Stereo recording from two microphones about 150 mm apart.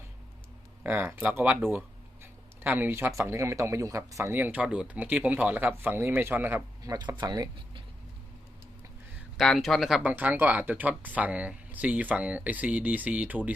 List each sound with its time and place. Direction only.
0.9 s speech: 15° right (ahead or behind)
9.4 s speech: centre (ahead or behind)
10.0 s speech: 10° right (ahead or behind)